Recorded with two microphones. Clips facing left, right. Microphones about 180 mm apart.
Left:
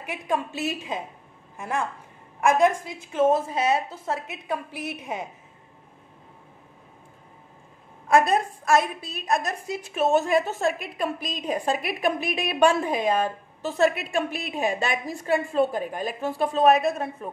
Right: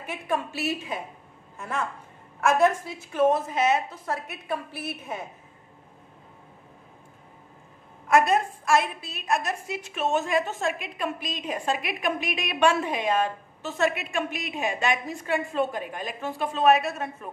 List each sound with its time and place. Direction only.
0.0 s a woman's voice: 15° left (ahead or behind)
2.4 s a woman's voice: 15° left (ahead or behind)
8.1 s a woman's voice: 40° left (ahead or behind)